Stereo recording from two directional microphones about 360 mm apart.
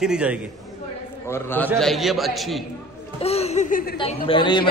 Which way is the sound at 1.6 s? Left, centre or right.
Centre.